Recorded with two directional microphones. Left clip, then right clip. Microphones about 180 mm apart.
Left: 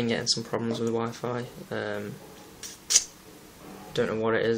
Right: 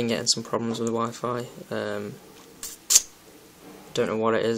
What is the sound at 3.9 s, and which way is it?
Speech, 45° right (ahead or behind).